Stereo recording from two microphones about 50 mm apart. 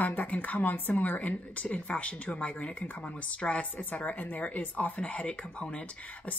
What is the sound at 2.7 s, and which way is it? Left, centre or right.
Speech, left.